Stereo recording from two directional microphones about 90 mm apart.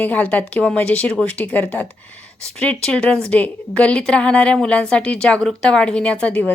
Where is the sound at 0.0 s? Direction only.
15° left (ahead or behind).